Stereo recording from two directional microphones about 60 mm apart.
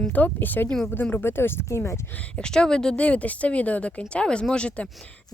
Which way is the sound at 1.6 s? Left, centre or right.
Left.